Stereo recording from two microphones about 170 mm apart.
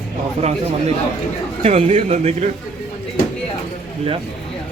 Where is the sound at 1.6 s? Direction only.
40° right (ahead or behind).